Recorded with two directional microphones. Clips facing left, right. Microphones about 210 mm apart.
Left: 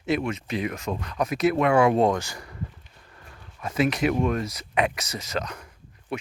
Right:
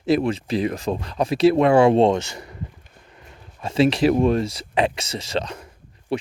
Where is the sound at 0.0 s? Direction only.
35° right (ahead or behind).